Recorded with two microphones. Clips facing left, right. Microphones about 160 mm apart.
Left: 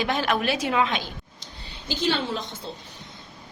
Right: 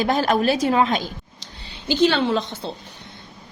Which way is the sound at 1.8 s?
75° right (ahead or behind).